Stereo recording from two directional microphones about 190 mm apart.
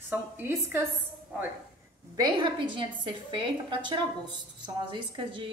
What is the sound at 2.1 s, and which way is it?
A woman's voice, 25° right (ahead or behind).